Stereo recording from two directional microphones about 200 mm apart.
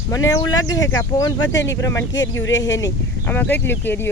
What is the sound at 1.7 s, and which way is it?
Speech, 15° left (ahead or behind).